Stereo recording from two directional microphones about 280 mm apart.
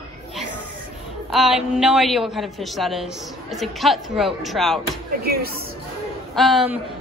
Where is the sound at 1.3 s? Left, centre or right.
Centre.